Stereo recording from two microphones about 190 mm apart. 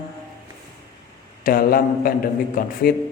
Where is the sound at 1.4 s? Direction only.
50° left (ahead or behind).